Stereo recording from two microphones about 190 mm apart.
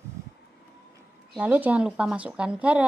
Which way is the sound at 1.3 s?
5° right (ahead or behind).